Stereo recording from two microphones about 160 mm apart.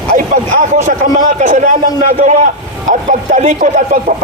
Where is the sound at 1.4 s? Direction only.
50° right (ahead or behind).